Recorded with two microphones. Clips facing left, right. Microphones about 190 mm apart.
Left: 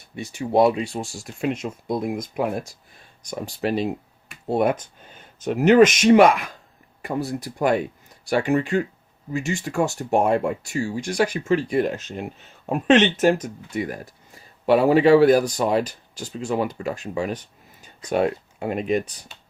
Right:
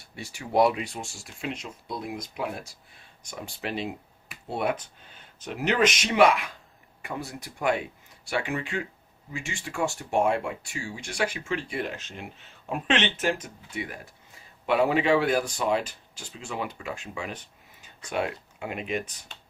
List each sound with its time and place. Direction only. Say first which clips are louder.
0.2 s speech: left 5 dB; 25° left (ahead or behind); by 19.1 s 40° left (ahead or behind)